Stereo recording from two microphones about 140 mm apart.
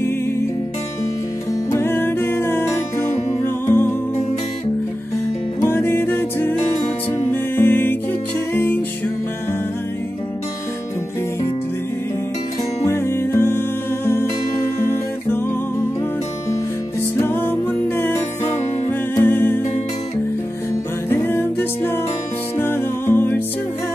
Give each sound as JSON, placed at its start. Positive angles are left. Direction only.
{"t": 1.7, "sound": "music", "side_deg": 15}
{"t": 5.6, "sound": "music", "side_deg": 20}
{"t": 12.8, "sound": "music", "side_deg": 20}
{"t": 17.2, "sound": "music", "side_deg": 15}
{"t": 21.1, "sound": "music", "side_deg": 15}